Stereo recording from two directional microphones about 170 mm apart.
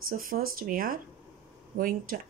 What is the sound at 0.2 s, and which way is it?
Speech, 55° right (ahead or behind).